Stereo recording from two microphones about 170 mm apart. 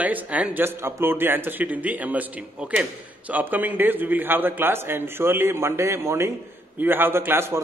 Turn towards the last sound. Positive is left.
turn(degrees=-15)  # may be behind; listen again after turning